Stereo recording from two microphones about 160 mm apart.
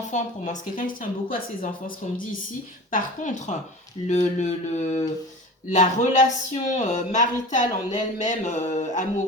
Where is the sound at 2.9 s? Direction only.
50° left (ahead or behind).